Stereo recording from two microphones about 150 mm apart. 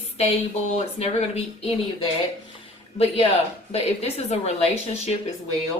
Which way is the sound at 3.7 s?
45° left (ahead or behind).